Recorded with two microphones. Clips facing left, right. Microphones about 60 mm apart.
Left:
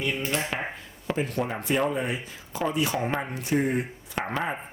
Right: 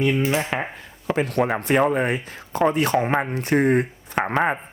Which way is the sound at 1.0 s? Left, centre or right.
Right.